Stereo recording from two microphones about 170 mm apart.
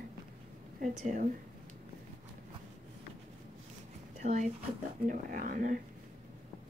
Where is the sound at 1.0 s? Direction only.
45° right (ahead or behind).